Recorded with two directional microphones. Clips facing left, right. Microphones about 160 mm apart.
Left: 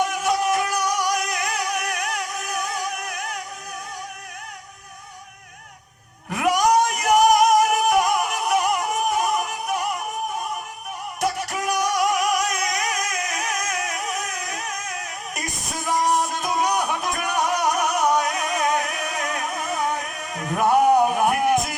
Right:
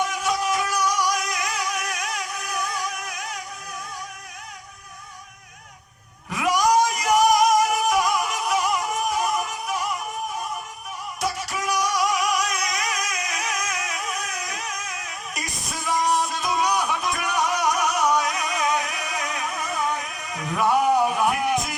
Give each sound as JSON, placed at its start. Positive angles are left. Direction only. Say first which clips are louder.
{"t": 0.1, "sound": "music", "louder": "left 3 dB", "side_deg": 55}
{"t": 6.3, "sound": "a sound", "louder": "left 1 dB", "side_deg": 55}
{"t": 7.9, "sound": "music", "louder": "left 2 dB", "side_deg": 55}
{"t": 11.2, "sound": "music", "louder": "left 3 dB", "side_deg": 55}